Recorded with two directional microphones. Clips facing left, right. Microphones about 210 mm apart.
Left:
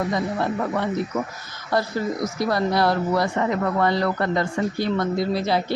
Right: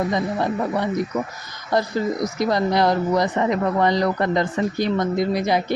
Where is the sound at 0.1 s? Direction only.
15° right (ahead or behind).